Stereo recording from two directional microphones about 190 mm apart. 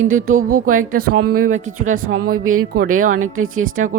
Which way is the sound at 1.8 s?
90° right.